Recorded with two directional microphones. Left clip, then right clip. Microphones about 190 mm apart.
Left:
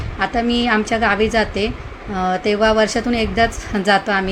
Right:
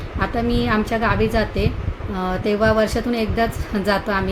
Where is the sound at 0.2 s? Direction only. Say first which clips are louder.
Left 3 dB; 10° left (ahead or behind).